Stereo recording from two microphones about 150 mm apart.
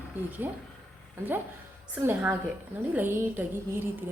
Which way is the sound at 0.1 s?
15° right (ahead or behind).